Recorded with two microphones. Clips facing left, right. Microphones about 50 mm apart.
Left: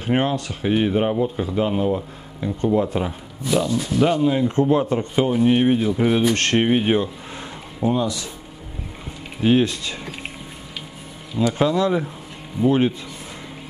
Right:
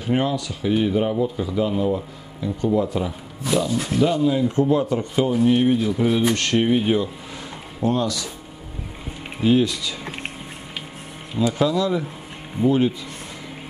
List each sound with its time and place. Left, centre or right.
0.0 s speech: left
3.4 s speech: centre
4.0 s speech: left
5.1 s speech: left
6.3 s speech: left
7.8 s speech: centre
9.4 s speech: left
11.5 s speech: left